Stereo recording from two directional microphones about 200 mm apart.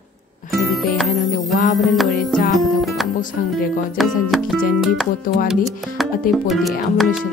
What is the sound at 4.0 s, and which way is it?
Speech, centre (ahead or behind).